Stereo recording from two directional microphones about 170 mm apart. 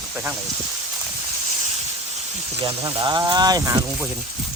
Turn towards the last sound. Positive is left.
turn(degrees=-20)  # may be behind; listen again after turning